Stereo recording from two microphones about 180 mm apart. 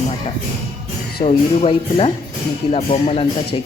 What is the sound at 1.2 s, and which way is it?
Speech, 35° left (ahead or behind).